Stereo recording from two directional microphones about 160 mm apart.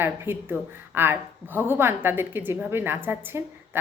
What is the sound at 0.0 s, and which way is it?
A woman's voice, 15° right (ahead or behind).